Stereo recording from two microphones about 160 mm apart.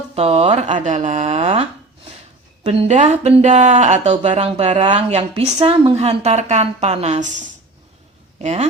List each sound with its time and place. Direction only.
0.1 s a woman's voice: 40° right (ahead or behind)
2.6 s a woman's voice: 40° right (ahead or behind)